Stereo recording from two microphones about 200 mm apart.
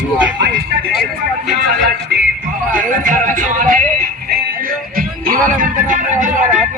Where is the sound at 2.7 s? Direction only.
40° right (ahead or behind).